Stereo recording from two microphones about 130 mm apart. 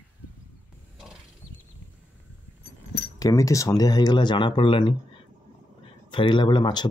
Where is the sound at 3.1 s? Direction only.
25° left (ahead or behind).